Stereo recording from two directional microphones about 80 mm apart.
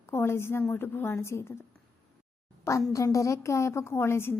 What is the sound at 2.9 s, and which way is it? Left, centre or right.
Speech, left.